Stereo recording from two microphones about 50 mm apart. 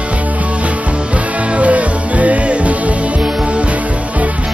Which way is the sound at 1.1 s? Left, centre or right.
Right.